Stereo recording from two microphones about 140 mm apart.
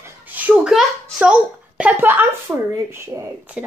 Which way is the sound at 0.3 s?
10° right (ahead or behind).